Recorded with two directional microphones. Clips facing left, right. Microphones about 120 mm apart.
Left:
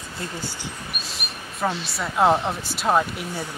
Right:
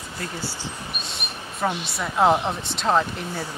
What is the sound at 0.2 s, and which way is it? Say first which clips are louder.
Speech: even; 15° left (ahead or behind).